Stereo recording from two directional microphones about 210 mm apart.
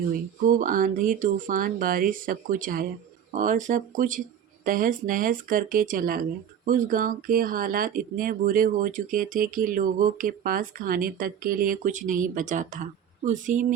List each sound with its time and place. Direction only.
0.4 s speech: 40° right (ahead or behind)